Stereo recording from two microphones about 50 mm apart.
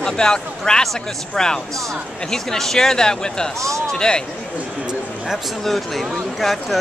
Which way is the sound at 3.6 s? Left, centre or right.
Right.